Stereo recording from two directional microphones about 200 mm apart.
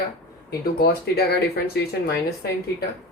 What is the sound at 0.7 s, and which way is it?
Speech, 50° left (ahead or behind).